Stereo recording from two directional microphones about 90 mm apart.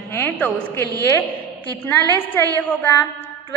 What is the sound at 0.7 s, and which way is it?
Speech, 35° left (ahead or behind).